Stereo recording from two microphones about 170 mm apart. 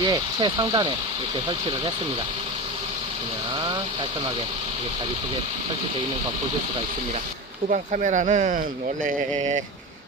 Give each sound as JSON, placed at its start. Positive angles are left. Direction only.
{"t": 0.0, "sound": "speech", "side_deg": -25}
{"t": 7.7, "sound": "speech", "side_deg": -45}